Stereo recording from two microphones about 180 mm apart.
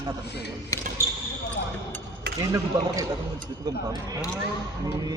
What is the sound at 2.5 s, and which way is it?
Speech, 20° right (ahead or behind).